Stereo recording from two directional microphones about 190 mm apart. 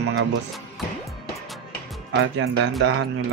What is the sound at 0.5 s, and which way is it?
Music, centre (ahead or behind).